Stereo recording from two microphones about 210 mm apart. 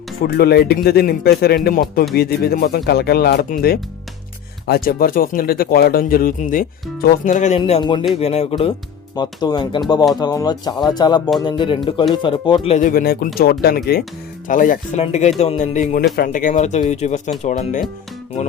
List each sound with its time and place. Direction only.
0.2 s speech: 50° left (ahead or behind)
4.6 s speech: 45° left (ahead or behind)